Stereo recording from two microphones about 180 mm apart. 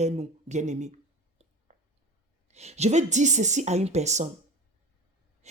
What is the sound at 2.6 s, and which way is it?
Speech, 35° right (ahead or behind).